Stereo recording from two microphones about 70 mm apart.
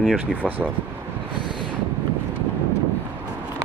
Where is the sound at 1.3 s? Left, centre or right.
Left.